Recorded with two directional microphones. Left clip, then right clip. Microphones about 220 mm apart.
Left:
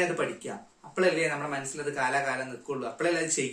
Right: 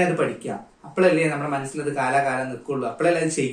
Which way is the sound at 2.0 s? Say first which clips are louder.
Right 7 dB; 10° left (ahead or behind).